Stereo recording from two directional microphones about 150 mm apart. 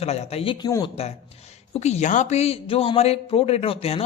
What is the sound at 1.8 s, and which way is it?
A man's voice, 50° left (ahead or behind).